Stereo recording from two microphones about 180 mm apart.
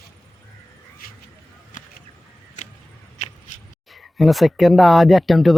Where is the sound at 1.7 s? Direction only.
45° left (ahead or behind).